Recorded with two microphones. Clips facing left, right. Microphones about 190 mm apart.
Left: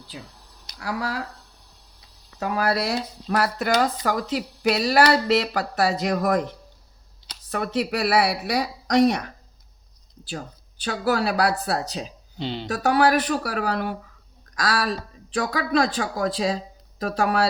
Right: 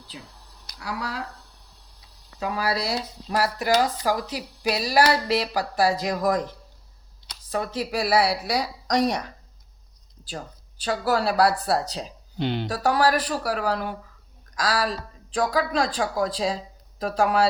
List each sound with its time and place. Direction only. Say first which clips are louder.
0.8 s speech: left 4 dB; 60° left (ahead or behind)
2.4 s speech: left 3 dB; 55° left (ahead or behind)
7.5 s speech: left 2 dB; 65° left (ahead or behind)
12.4 s speech: right 3 dB; centre (ahead or behind)
12.6 s speech: left 3 dB; 70° left (ahead or behind)